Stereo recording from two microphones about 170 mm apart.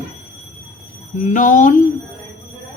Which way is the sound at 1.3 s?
50° left (ahead or behind).